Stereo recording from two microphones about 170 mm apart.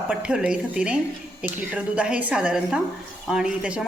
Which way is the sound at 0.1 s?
5° right (ahead or behind).